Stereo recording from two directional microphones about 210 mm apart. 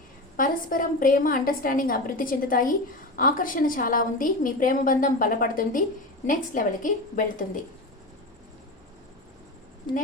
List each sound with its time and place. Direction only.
0.3 s a woman's voice: 40° left (ahead or behind)
9.9 s speech: 20° left (ahead or behind)